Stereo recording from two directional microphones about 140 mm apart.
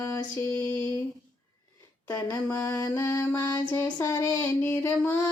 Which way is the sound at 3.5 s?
30° left (ahead or behind).